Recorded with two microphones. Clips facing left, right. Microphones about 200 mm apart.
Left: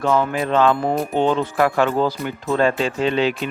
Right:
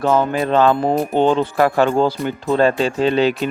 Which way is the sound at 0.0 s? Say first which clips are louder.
Right 2 dB; 30° right (ahead or behind).